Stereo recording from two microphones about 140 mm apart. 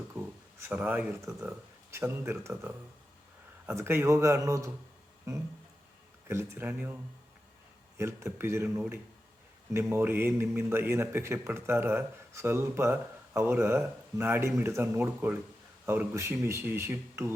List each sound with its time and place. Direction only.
0.7 s speech: 10° right (ahead or behind)
7.9 s speech: 20° right (ahead or behind)